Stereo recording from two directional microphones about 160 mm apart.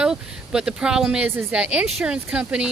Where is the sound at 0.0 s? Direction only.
5° right (ahead or behind).